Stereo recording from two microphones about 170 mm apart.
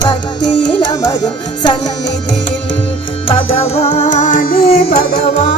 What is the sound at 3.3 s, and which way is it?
Music, 35° left (ahead or behind).